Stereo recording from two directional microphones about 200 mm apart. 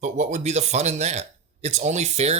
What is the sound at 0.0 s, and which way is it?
Speech, 35° right (ahead or behind).